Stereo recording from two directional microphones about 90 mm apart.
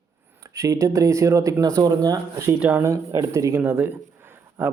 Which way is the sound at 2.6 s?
20° right (ahead or behind).